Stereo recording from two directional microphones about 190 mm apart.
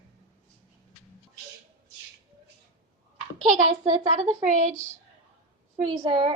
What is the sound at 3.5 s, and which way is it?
Speech, 40° right (ahead or behind).